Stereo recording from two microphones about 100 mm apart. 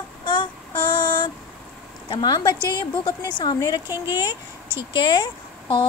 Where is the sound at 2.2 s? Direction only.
45° left (ahead or behind).